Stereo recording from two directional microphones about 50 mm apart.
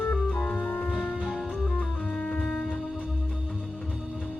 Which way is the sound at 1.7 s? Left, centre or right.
Left.